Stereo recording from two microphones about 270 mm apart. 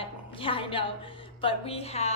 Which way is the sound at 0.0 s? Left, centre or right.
Centre.